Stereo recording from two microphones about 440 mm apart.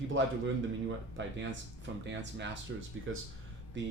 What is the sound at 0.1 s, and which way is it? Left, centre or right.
Speech, right.